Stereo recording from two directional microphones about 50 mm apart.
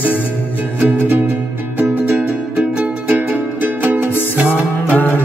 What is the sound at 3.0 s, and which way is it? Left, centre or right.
Music, right.